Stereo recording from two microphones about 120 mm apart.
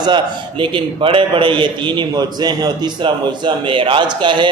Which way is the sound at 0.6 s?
45° right (ahead or behind).